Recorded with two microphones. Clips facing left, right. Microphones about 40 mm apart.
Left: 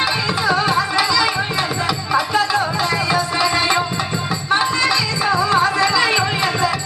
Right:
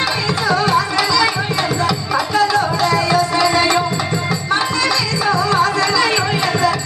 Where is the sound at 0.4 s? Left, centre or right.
Centre.